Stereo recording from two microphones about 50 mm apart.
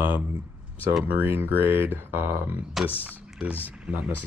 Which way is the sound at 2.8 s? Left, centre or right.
Centre.